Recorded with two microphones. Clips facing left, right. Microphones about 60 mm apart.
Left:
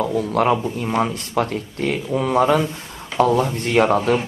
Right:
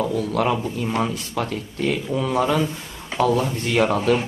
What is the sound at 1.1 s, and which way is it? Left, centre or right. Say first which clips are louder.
Speech: left 4 dB; left.